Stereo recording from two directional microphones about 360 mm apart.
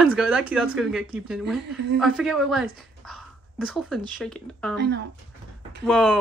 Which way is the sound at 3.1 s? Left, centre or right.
Centre.